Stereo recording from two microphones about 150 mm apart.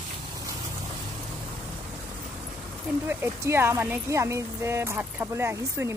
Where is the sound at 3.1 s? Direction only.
15° right (ahead or behind).